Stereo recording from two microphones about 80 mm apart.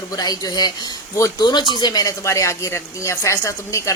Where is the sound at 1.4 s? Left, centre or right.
Left.